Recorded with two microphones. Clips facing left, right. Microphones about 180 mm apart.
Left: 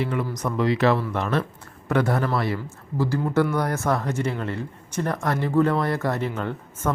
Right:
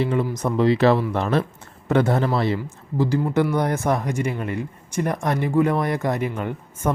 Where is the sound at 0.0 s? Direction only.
30° right (ahead or behind).